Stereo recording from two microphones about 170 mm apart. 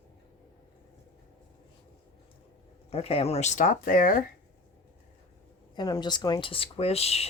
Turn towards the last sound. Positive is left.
turn(degrees=35)  # may be behind; listen again after turning